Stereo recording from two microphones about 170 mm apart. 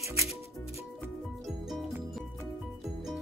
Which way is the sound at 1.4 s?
Centre (ahead or behind).